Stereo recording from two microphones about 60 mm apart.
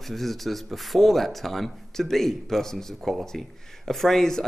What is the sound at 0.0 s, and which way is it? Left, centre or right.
Speech, centre.